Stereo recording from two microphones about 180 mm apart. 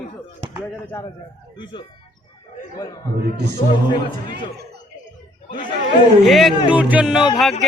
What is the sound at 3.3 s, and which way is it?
Speech, 70° right (ahead or behind).